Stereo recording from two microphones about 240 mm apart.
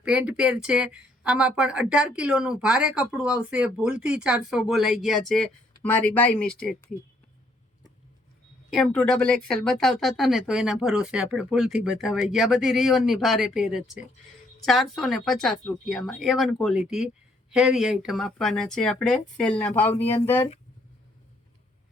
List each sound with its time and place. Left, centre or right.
0.0 s speech: centre
8.7 s speech: centre